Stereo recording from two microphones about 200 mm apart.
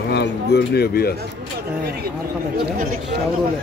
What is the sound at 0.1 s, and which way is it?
Speech, 55° left (ahead or behind).